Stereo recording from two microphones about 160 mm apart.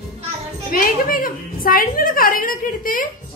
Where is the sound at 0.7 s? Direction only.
65° left (ahead or behind).